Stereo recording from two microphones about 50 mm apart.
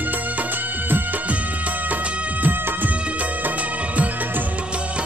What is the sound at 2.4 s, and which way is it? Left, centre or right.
Music of bollywood, right.